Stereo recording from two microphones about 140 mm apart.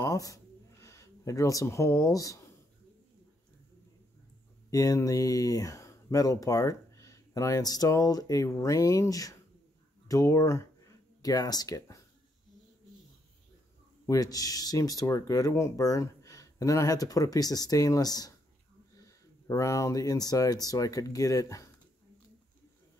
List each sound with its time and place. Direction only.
0.0 s a sound: 25° left (ahead or behind)
4.6 s speech: 25° left (ahead or behind)
14.0 s speech: 25° left (ahead or behind)